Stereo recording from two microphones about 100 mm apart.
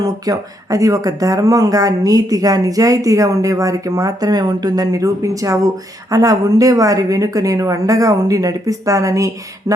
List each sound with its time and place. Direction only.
0.0 s speech: 35° right (ahead or behind)